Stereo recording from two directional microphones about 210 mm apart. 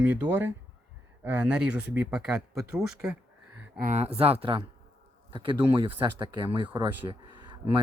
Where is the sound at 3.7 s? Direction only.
40° right (ahead or behind).